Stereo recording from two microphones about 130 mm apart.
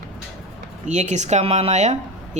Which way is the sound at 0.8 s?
60° right (ahead or behind).